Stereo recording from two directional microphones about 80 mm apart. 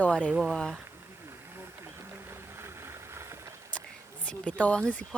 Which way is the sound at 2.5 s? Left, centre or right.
Right.